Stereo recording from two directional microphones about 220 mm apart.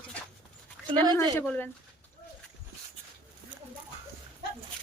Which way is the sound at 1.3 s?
10° left (ahead or behind).